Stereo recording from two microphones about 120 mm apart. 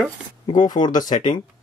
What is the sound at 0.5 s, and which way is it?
Speech, 35° left (ahead or behind).